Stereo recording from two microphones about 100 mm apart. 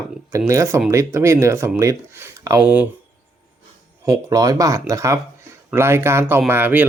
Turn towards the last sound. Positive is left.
turn(degrees=-20)  # may be behind; listen again after turning